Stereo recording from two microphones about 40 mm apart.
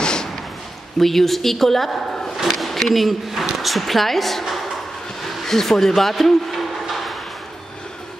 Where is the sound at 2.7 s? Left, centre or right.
Centre.